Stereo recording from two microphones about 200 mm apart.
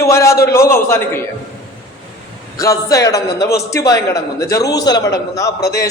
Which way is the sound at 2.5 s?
15° left (ahead or behind).